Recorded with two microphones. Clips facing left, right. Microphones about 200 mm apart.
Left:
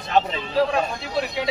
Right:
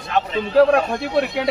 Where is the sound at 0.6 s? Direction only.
60° right (ahead or behind).